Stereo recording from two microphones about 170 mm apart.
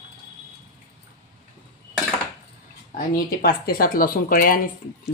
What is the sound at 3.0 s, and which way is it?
Speech, 60° left (ahead or behind).